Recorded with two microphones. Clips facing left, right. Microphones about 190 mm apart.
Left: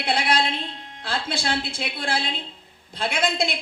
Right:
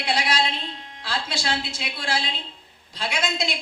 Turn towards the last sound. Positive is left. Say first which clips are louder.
# left 3 dB
turn(degrees=55)  # may be behind; listen again after turning